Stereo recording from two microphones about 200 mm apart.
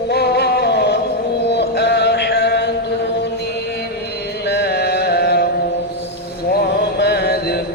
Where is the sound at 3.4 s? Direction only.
55° left (ahead or behind).